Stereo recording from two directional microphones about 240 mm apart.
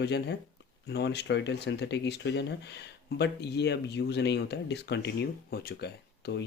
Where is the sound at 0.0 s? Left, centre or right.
Left.